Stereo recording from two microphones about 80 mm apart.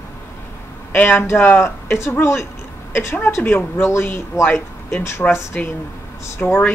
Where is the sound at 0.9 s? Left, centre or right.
Left.